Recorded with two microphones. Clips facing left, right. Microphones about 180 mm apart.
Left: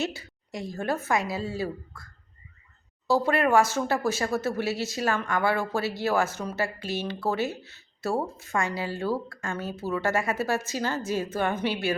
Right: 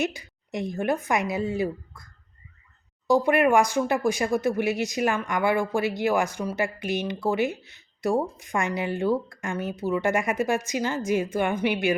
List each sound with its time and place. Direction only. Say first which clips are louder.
0.0 s speech: right 3 dB; 15° right (ahead or behind)
3.1 s speech: right 3 dB; 15° right (ahead or behind)